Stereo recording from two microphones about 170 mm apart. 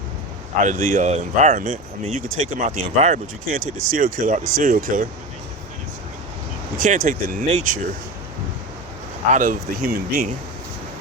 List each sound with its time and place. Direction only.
0.6 s speech: 45° right (ahead or behind)
6.7 s speech: 45° right (ahead or behind)
9.3 s speech: 50° right (ahead or behind)